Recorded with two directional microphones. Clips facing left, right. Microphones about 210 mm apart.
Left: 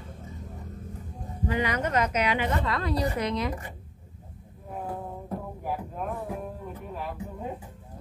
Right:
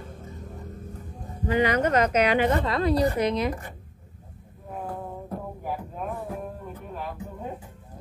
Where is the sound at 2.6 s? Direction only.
25° right (ahead or behind).